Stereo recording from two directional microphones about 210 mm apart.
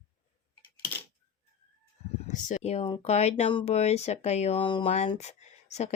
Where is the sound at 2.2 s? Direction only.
35° left (ahead or behind).